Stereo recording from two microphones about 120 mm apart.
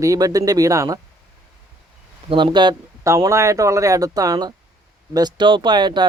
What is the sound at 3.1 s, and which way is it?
Speech, 25° right (ahead or behind).